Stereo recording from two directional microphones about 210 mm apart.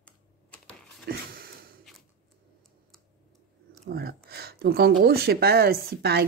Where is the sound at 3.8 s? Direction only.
45° right (ahead or behind).